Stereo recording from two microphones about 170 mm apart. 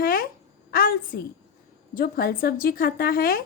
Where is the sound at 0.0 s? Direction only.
60° left (ahead or behind).